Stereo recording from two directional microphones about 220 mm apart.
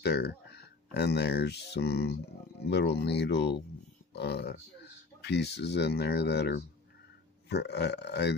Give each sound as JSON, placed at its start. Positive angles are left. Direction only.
{"t": 0.0, "sound": "speech", "side_deg": 50}